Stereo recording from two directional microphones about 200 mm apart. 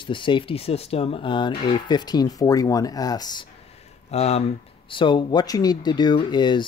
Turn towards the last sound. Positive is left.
turn(degrees=20)  # may be behind; listen again after turning